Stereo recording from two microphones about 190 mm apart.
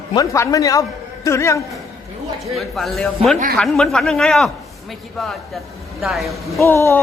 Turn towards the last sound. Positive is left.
turn(degrees=15)  # may be behind; listen again after turning